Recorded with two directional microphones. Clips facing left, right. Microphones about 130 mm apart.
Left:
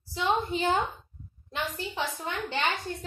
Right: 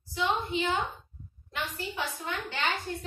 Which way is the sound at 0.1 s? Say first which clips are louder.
Left 2 dB; 40° left (ahead or behind).